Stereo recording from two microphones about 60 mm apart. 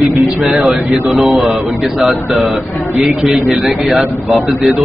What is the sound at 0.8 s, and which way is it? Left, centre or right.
Speech, right.